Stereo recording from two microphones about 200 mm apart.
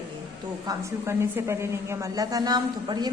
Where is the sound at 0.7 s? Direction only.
15° right (ahead or behind).